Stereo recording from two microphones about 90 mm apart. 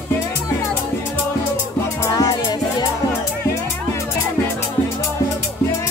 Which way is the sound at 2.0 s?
40° left (ahead or behind).